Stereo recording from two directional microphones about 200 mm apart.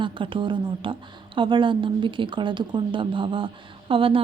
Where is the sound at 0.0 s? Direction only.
25° right (ahead or behind).